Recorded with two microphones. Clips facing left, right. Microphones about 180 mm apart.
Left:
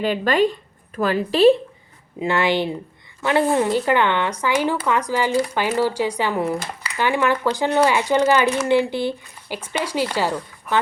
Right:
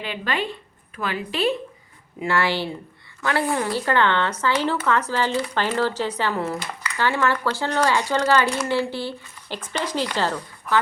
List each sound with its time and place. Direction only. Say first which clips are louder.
0.0 s a woman's voice: left 9 dB; 45° left (ahead or behind)
2.1 s speech: left 3 dB; 20° left (ahead or behind)